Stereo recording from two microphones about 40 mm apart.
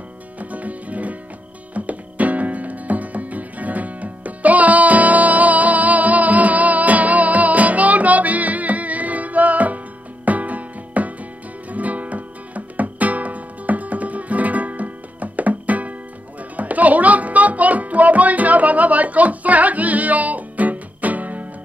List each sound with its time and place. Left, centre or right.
0.4 s music: right